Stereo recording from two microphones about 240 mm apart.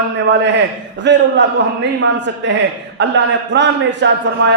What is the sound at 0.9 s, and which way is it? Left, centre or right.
A man's voice, right.